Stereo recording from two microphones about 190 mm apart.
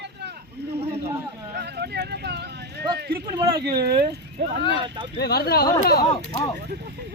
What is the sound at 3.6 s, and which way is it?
Speech, 55° right (ahead or behind).